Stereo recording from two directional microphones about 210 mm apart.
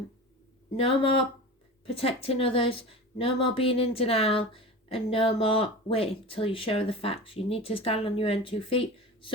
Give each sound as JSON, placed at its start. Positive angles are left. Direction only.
{"t": 0.8, "sound": "a woman's voice", "side_deg": 25}